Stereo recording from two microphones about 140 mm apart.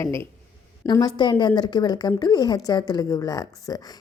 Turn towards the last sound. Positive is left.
turn(degrees=25)  # may be behind; listen again after turning